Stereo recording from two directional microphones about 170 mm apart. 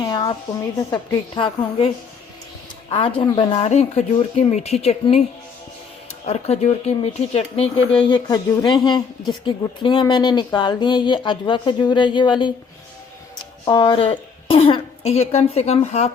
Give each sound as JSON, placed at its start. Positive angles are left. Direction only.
{"t": 0.0, "sound": "a sound", "side_deg": 25}
{"t": 0.8, "sound": "speech", "side_deg": 20}
{"t": 3.2, "sound": "speech", "side_deg": 30}
{"t": 6.2, "sound": "speech", "side_deg": 40}
{"t": 8.0, "sound": "speech", "side_deg": 25}
{"t": 13.7, "sound": "speech", "side_deg": 25}